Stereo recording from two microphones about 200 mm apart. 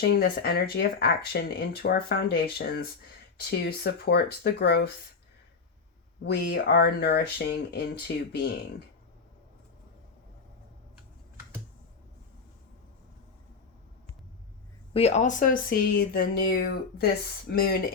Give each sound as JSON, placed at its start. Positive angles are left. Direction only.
{"t": 0.0, "sound": "speech", "side_deg": 50}
{"t": 6.2, "sound": "speech", "side_deg": 55}
{"t": 14.9, "sound": "speech", "side_deg": 30}